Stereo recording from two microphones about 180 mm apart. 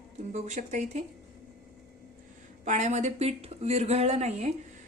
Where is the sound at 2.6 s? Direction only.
40° right (ahead or behind).